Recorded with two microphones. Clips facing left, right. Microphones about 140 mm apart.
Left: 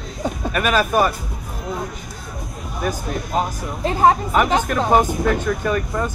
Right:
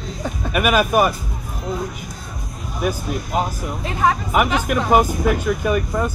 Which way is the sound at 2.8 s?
10° right (ahead or behind).